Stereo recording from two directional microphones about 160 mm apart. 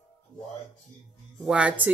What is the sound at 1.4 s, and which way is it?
Speech, 10° right (ahead or behind).